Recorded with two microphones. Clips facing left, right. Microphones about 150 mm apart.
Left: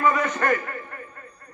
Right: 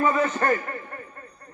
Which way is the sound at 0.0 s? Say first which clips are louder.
Even; 30° right (ahead or behind).